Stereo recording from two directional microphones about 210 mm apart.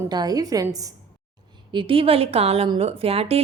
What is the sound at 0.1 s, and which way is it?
A woman's voice, 20° right (ahead or behind).